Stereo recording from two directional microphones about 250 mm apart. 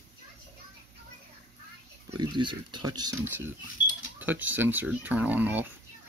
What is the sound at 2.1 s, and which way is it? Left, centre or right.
Speech, centre.